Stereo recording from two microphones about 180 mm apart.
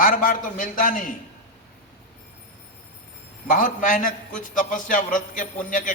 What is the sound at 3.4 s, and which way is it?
A man's voice, 45° left (ahead or behind).